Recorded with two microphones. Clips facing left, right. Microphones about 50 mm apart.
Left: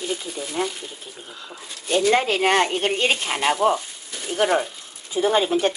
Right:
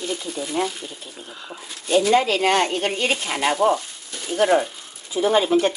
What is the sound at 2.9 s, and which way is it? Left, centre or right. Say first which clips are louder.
Speech: left 1 dB; left.